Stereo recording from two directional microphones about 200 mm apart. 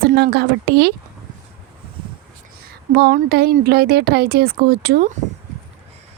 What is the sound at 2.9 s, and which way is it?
Speech, 50° right (ahead or behind).